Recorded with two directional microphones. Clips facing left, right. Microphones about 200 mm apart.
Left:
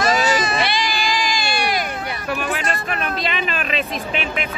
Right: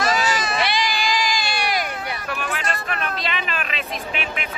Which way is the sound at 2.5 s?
15° left (ahead or behind).